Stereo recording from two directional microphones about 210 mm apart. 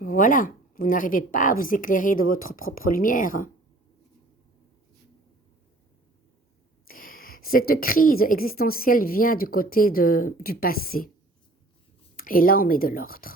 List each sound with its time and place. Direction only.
0.0 s a woman's voice: 40° left (ahead or behind)
6.8 s a sound: 40° left (ahead or behind)
7.7 s a woman's voice: 45° left (ahead or behind)
12.1 s a woman's voice: 40° left (ahead or behind)